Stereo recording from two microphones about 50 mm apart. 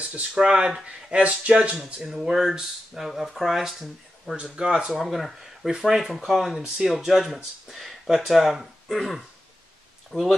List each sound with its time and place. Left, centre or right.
0.0 s speech: right
1.1 s speech: right
2.0 s speech: centre
4.4 s speech: centre
4.8 s speech: centre
5.7 s speech: centre